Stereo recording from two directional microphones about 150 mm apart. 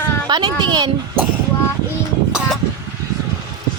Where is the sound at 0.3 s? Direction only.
30° right (ahead or behind).